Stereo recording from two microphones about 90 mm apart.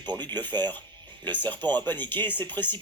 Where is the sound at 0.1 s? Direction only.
55° right (ahead or behind).